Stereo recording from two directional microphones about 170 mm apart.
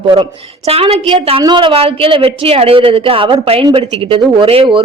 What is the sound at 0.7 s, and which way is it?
A woman's voice, 35° right (ahead or behind).